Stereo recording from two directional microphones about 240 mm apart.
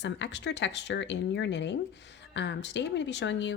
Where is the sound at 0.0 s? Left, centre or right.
Left.